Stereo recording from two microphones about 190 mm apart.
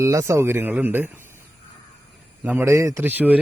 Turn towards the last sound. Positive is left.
turn(degrees=-10)  # may be behind; listen again after turning